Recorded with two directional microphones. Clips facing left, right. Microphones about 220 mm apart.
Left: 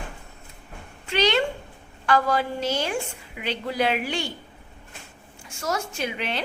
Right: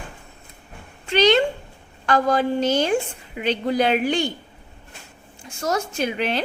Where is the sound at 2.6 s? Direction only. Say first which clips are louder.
Right 6 dB; centre (ahead or behind).